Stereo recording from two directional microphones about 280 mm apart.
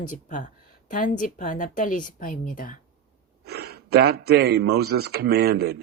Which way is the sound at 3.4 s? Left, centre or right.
Right.